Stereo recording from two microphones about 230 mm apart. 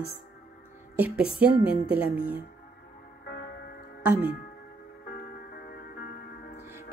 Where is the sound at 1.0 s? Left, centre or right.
Centre.